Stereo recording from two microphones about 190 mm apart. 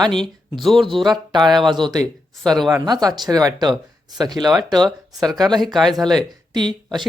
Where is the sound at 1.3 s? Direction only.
20° right (ahead or behind).